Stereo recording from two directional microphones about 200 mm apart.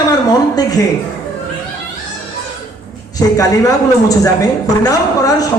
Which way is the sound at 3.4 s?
15° left (ahead or behind).